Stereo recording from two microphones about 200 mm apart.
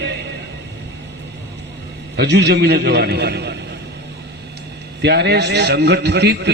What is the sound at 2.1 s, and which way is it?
A man's voice, 55° right (ahead or behind).